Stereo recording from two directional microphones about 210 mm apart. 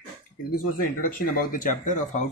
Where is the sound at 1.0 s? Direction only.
40° left (ahead or behind).